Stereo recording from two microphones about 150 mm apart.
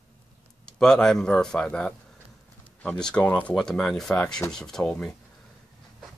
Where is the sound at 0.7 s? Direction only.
5° left (ahead or behind).